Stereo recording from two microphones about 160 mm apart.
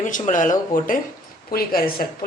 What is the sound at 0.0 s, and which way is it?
Speech, 50° left (ahead or behind).